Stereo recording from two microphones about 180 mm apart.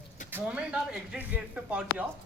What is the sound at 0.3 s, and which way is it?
Speech, 10° right (ahead or behind).